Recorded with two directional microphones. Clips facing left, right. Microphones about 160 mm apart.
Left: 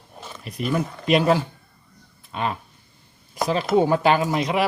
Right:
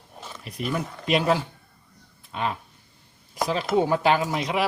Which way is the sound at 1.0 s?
50° left (ahead or behind).